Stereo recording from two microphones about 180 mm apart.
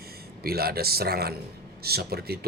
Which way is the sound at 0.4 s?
60° right (ahead or behind).